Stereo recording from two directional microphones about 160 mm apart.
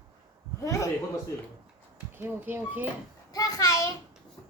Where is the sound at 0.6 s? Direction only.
20° left (ahead or behind).